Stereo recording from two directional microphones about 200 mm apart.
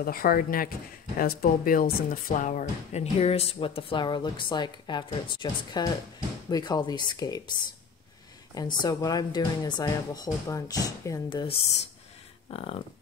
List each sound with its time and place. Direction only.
0.0 s speech: 45° left (ahead or behind); by 7.5 s 20° left (ahead or behind)
8.5 s speech: 20° left (ahead or behind)